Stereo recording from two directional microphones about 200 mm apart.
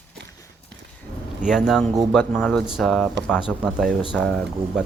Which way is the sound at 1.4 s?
5° right (ahead or behind).